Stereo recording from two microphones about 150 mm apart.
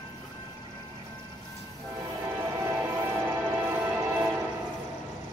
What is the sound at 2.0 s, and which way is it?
Music, 20° right (ahead or behind).